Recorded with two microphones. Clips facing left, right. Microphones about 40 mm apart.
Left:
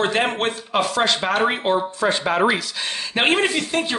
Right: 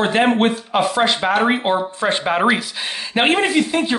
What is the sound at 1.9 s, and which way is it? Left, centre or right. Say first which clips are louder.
Speech: right 1 dB; right.